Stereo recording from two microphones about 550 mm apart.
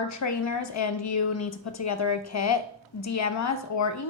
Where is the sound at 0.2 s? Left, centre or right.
Left.